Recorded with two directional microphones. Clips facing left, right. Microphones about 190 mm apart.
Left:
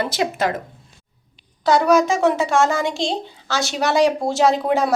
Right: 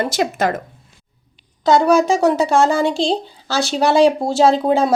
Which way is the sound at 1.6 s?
25° right (ahead or behind).